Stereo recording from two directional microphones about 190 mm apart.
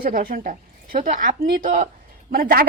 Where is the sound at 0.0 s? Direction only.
50° right (ahead or behind).